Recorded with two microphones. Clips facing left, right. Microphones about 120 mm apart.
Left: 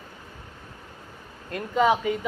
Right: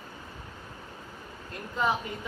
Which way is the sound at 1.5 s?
90° left.